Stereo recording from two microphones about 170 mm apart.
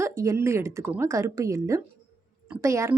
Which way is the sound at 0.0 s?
15° right (ahead or behind).